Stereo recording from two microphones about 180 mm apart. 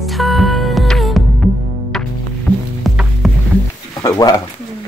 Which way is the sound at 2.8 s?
Centre (ahead or behind).